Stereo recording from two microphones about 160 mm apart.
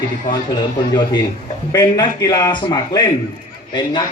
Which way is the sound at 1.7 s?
25° left (ahead or behind).